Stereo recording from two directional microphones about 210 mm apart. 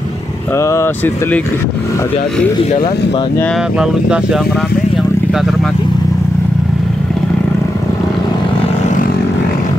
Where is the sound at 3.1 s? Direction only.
10° left (ahead or behind).